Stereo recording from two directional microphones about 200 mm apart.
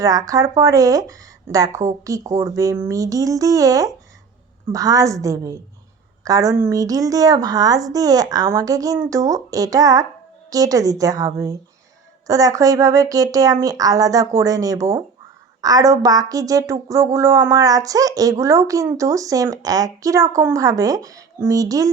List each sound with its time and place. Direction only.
0.0 s speech: 15° right (ahead or behind)